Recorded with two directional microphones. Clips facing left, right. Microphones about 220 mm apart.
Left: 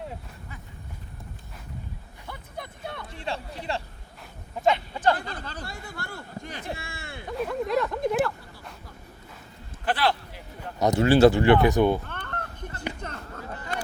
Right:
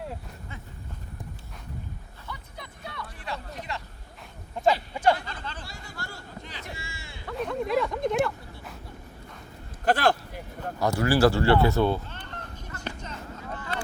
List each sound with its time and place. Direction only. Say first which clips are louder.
2.2 s music: left 4 dB; 55° left (ahead or behind)
3.0 s vehicle: left 2 dB; 25° left (ahead or behind)
4.6 s speech: even; 5° left (ahead or behind)
5.1 s speech: left 2 dB; 40° left (ahead or behind)
5.6 s speech: left 3 dB; 55° left (ahead or behind)
7.3 s speech: even; centre (ahead or behind)
9.8 s a sound: right 3 dB; 45° right (ahead or behind)
10.8 s speech: left 4 dB; 20° left (ahead or behind)
12.0 s honk: left 4 dB; 60° left (ahead or behind)
13.0 s a sound: left 1 dB; 60° left (ahead or behind)
13.6 s vehicle: left 1 dB; 40° left (ahead or behind)